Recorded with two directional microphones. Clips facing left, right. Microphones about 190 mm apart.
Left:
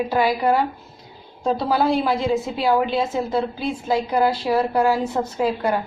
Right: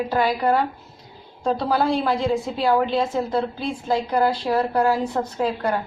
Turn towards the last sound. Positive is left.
turn(degrees=10)  # may be behind; listen again after turning